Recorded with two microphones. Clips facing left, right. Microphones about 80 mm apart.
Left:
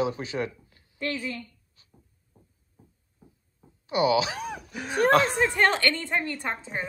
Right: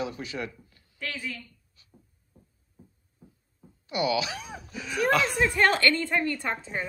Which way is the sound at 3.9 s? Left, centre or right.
Left.